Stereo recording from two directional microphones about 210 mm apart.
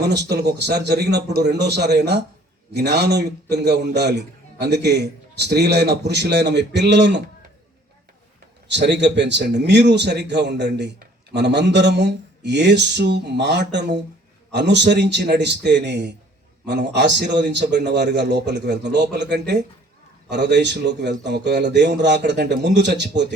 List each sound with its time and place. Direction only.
0.0 s a man's voice: 50° right (ahead or behind)
8.6 s a man's voice: 55° right (ahead or behind)